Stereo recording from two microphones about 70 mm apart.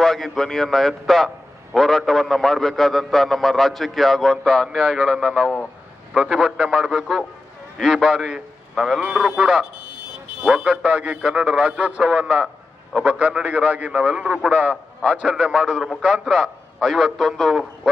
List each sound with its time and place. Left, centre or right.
0.0 s a man's voice: centre
4.7 s a man's voice: centre
6.1 s a man's voice: centre; by 14.8 s right
15.2 s speech: centre
15.9 s a man's voice: centre